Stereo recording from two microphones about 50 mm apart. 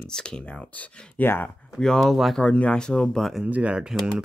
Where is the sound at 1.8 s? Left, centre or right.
Centre.